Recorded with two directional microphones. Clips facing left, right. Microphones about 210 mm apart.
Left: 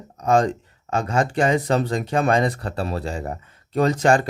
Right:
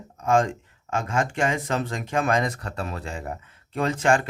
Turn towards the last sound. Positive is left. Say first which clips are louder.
# left 4 dB
turn(degrees=40)  # may be behind; listen again after turning